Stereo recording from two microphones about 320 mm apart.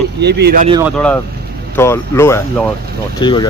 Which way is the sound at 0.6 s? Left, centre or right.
Centre.